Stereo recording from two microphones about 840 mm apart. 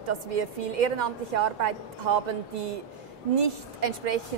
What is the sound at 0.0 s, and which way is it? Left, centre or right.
A woman's voice, right.